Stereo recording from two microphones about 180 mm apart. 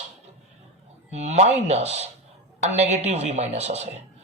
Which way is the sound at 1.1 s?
40° right (ahead or behind).